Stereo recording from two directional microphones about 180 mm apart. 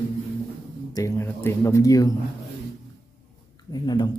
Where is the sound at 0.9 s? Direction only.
20° left (ahead or behind).